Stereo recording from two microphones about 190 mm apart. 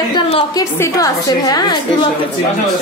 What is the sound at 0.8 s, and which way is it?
Speech, 20° left (ahead or behind).